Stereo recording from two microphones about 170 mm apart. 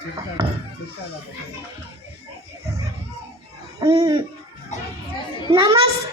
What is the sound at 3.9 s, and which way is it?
Hoot, 35° right (ahead or behind).